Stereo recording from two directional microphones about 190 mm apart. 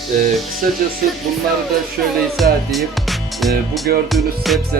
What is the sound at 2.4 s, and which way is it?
Speech, centre (ahead or behind).